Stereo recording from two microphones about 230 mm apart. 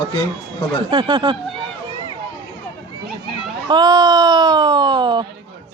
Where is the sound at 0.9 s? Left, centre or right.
Centre.